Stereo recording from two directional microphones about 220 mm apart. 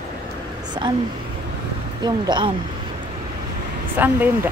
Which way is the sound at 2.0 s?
20° right (ahead or behind).